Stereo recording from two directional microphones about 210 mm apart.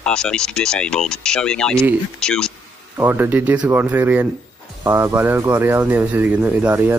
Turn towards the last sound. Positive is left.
turn(degrees=-10)  # may be behind; listen again after turning